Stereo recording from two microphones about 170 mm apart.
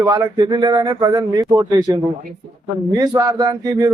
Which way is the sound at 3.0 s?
20° right (ahead or behind).